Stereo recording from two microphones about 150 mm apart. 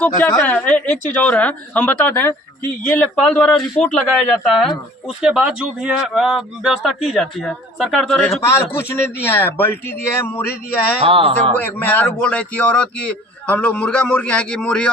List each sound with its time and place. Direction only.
0.0 s a man's voice: 10° left (ahead or behind)
8.4 s a man's voice: 15° left (ahead or behind)
11.0 s speech: 35° right (ahead or behind)
11.5 s a man's voice: 15° left (ahead or behind)